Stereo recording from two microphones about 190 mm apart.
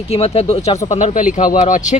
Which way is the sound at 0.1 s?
30° left (ahead or behind).